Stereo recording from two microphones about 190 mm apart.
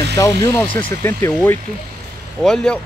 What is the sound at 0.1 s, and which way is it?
Speech, 15° left (ahead or behind).